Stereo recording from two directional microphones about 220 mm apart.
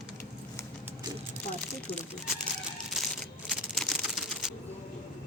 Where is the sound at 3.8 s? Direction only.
Centre (ahead or behind).